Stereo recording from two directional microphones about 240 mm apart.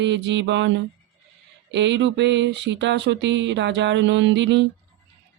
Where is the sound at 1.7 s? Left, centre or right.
Right.